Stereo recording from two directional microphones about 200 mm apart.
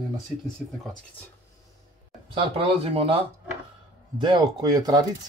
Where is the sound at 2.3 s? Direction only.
30° right (ahead or behind).